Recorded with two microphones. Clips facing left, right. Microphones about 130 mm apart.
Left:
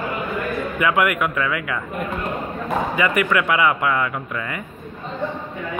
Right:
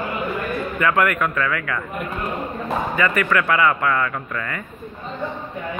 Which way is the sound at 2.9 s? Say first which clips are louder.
Even; 15° left (ahead or behind).